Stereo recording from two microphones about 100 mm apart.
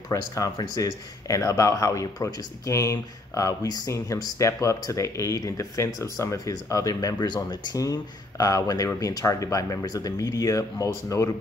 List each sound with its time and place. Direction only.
0.1 s speech: 35° left (ahead or behind)